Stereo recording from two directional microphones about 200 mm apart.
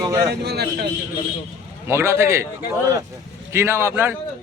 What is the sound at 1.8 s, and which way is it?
Speech, 15° right (ahead or behind).